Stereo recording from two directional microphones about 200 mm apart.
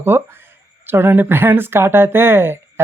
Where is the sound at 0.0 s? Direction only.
10° right (ahead or behind).